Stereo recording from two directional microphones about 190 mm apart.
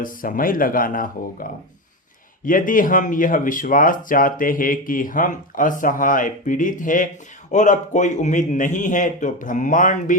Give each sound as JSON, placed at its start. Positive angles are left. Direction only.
{"t": 0.0, "sound": "a man's voice", "side_deg": 45}